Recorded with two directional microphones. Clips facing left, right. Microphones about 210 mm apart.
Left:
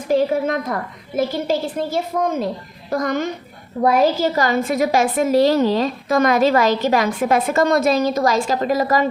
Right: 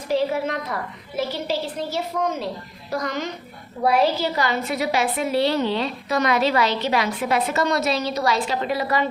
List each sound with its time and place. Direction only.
0.1 s a woman's voice: 45° left (ahead or behind)